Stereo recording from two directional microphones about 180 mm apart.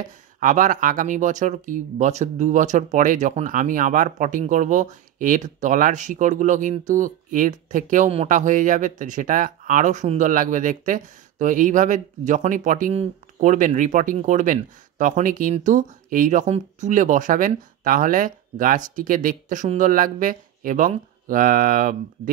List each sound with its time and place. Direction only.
0.0 s speech: 45° right (ahead or behind)